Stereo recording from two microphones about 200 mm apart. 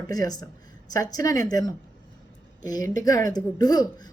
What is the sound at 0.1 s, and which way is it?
A man's voice, 20° left (ahead or behind).